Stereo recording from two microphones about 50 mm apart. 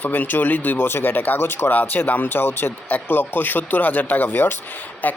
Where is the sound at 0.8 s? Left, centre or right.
Left.